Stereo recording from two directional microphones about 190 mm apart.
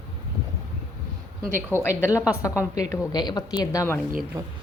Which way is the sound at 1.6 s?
10° right (ahead or behind).